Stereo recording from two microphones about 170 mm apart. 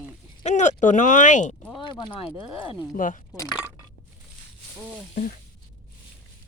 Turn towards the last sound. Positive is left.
turn(degrees=55)  # may be behind; listen again after turning